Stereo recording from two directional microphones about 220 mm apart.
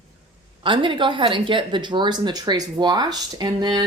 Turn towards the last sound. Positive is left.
turn(degrees=-20)  # may be behind; listen again after turning